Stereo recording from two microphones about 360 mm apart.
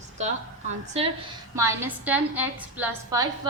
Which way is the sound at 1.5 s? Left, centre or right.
Centre.